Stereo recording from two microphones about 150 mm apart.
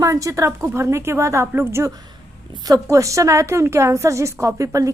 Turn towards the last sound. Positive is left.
turn(degrees=-20)  # may be behind; listen again after turning